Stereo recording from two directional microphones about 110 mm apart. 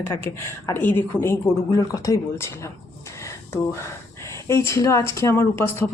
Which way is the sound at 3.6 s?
25° left (ahead or behind).